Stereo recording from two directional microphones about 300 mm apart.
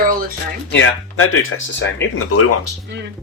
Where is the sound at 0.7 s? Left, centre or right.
Left.